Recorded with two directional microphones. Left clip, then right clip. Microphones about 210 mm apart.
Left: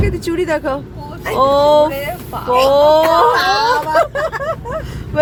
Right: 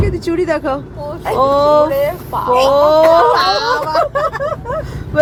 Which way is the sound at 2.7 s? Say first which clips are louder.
Right 2 dB; 20° left (ahead or behind).